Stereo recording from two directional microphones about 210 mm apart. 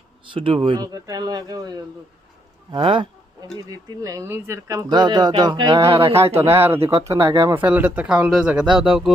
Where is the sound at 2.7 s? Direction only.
25° right (ahead or behind).